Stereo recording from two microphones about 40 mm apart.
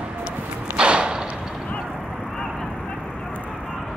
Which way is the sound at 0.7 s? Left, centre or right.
Right.